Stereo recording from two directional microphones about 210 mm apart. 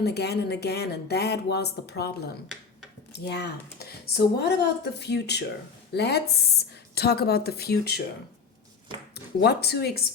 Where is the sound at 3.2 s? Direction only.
50° left (ahead or behind).